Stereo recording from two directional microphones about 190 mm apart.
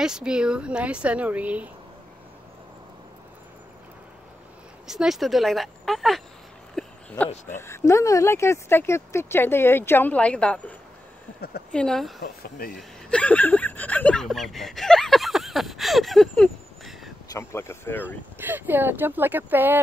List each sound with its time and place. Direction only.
0.0 s speech: 5° right (ahead or behind)
4.8 s speech: centre (ahead or behind)
6.7 s a sound: 5° left (ahead or behind)
7.4 s speech: 10° left (ahead or behind)
12.2 s speech: 50° left (ahead or behind)
12.7 s speech: 5° left (ahead or behind)
17.3 s speech: 15° left (ahead or behind)
18.0 s speech: 10° right (ahead or behind)